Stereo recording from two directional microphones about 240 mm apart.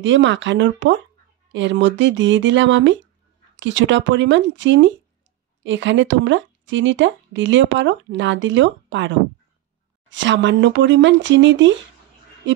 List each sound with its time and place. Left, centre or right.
0.0 s speech: right